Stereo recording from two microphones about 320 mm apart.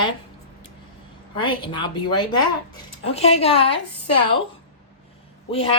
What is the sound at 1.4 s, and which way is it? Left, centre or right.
Speech, centre.